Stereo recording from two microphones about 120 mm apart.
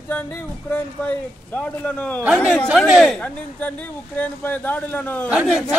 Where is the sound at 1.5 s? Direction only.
10° left (ahead or behind).